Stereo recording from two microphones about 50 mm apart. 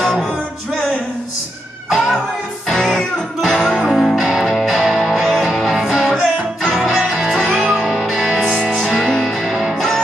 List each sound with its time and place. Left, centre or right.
0.0 s music: centre
1.9 s music: centre